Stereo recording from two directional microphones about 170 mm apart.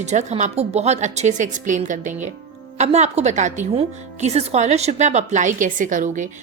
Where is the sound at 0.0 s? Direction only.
40° right (ahead or behind).